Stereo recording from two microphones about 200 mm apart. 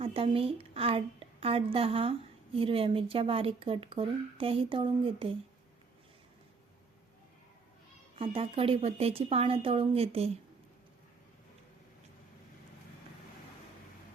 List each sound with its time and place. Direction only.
0.0 s a woman's voice: 30° right (ahead or behind)
8.2 s a woman's voice: 30° right (ahead or behind)